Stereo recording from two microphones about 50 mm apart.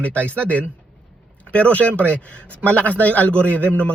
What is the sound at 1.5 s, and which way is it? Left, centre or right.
Speech, left.